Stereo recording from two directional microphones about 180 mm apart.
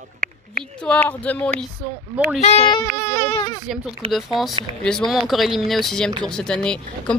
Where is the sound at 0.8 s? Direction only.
10° left (ahead or behind).